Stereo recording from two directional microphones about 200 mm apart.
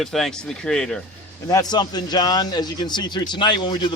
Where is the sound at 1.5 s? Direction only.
20° left (ahead or behind).